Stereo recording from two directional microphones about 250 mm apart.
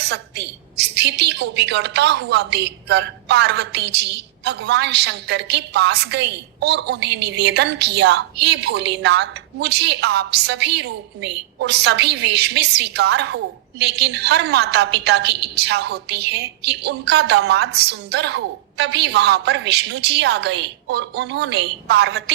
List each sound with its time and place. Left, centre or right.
0.0 s a woman's voice: right